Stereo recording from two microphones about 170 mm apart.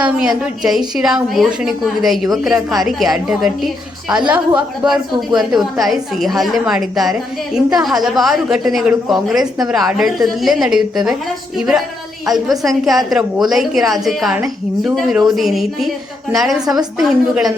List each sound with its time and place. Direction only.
0.0 s a woman's voice: 5° right (ahead or behind)
4.1 s a woman's voice: 25° right (ahead or behind)
4.5 s a woman's voice: 5° right (ahead or behind)